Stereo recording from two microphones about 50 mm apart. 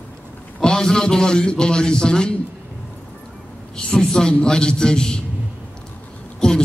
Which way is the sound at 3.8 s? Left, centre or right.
Centre.